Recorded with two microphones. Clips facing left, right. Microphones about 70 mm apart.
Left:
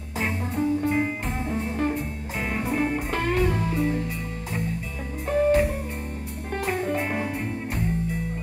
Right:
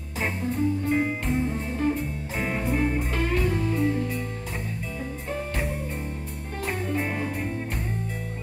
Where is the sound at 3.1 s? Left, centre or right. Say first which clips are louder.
Left 2 dB; left.